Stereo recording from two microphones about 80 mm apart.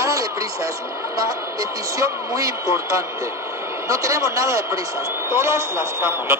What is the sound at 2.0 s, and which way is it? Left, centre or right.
Speech, right.